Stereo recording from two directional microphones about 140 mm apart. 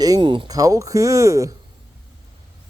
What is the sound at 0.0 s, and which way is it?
Speech, 30° right (ahead or behind).